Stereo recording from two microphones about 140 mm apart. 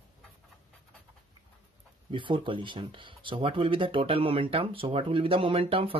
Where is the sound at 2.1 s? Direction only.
35° right (ahead or behind).